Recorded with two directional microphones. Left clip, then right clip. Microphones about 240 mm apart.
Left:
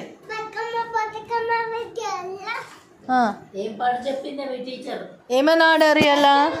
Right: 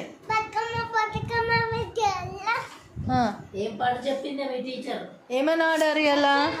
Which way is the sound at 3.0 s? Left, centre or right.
Centre.